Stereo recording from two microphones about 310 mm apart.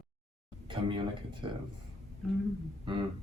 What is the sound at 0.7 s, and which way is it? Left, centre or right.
Speech, centre.